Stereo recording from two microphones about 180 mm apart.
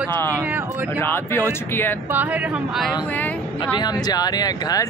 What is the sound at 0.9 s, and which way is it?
Speech, 10° left (ahead or behind).